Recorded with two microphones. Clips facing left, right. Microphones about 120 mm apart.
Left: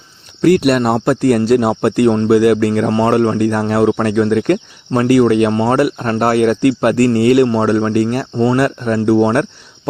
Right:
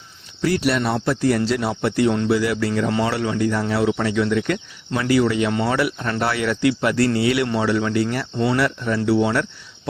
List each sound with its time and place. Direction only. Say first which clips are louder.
0.4 s speech: left 9 dB; 55° left (ahead or behind); by 8.5 s 40° left (ahead or behind)
8.5 s speech: left 6 dB; 50° left (ahead or behind)